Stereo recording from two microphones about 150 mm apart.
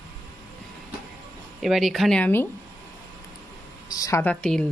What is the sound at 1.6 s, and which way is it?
Speech, centre (ahead or behind).